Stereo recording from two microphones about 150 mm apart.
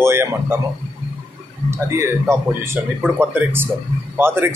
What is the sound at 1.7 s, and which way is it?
A man's voice, 20° right (ahead or behind).